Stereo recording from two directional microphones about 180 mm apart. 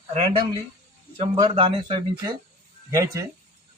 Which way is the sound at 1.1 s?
30° right (ahead or behind).